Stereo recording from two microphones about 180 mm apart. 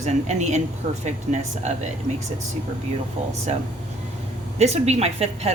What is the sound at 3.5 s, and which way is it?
Speech, 35° right (ahead or behind).